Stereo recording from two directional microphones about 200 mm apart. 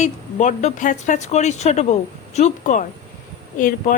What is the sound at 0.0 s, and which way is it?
A woman's voice, 35° left (ahead or behind).